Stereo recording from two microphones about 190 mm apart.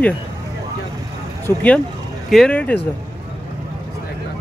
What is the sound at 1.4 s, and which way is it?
Speech, 5° left (ahead or behind).